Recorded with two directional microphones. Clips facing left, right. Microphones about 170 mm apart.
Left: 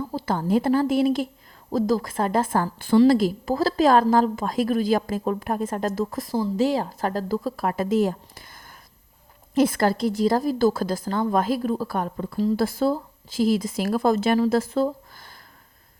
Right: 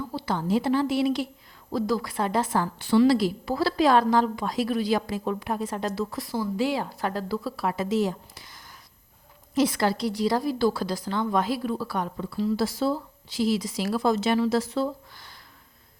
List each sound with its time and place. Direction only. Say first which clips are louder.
0.1 s speech: left 3 dB; 45° left (ahead or behind)